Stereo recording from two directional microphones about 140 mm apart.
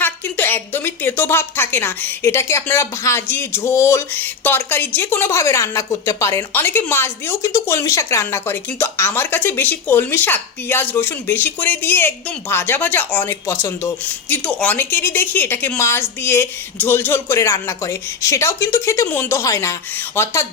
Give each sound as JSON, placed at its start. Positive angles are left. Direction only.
{"t": 0.0, "sound": "a woman's voice", "side_deg": 15}